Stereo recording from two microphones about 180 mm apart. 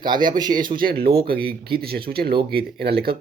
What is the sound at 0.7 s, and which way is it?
Speech, 55° right (ahead or behind).